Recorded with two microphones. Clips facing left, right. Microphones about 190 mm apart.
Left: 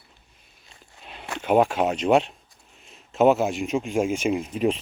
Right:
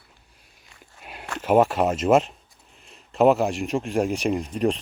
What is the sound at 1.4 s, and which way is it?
Speech, centre (ahead or behind).